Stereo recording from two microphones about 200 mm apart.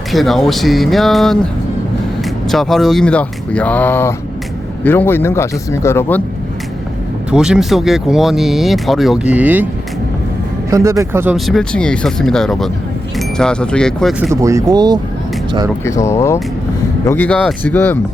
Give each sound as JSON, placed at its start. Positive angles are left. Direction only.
{"t": 0.1, "sound": "speech", "side_deg": 0}
{"t": 2.5, "sound": "a man's voice", "side_deg": 0}
{"t": 7.3, "sound": "speech", "side_deg": -5}
{"t": 10.7, "sound": "speech", "side_deg": -15}
{"t": 11.3, "sound": "speech", "side_deg": 0}
{"t": 14.4, "sound": "speech", "side_deg": -15}
{"t": 15.8, "sound": "a man's voice", "side_deg": 15}